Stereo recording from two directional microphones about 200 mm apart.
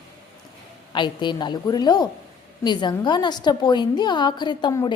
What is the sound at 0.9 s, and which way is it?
A woman's voice, 20° left (ahead or behind).